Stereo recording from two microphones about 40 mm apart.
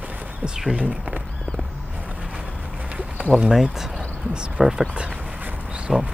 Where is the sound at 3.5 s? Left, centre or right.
Centre.